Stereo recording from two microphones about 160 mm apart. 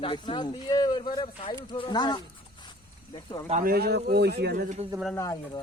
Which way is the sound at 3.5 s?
65° right (ahead or behind).